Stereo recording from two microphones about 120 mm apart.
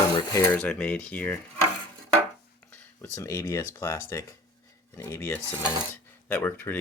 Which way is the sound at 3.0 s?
25° left (ahead or behind).